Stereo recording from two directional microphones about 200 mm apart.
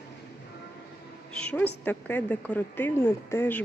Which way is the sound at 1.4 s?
5° left (ahead or behind).